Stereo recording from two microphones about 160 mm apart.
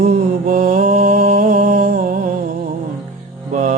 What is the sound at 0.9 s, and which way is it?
Music, 55° right (ahead or behind).